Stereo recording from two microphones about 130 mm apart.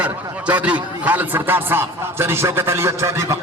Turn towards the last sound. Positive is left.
turn(degrees=-20)  # may be behind; listen again after turning